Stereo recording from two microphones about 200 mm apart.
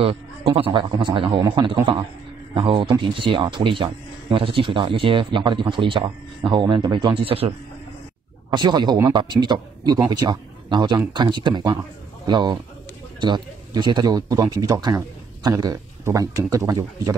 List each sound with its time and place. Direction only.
0.5 s speech: 25° right (ahead or behind)